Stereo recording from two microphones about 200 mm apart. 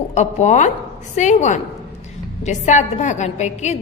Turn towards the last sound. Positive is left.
turn(degrees=35)  # may be behind; listen again after turning